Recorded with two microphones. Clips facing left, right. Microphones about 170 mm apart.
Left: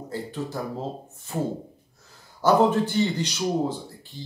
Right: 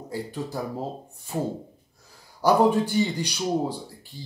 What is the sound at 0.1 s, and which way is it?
Speech, 10° right (ahead or behind).